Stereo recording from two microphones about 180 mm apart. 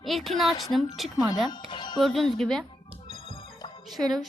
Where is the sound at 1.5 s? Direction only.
25° left (ahead or behind).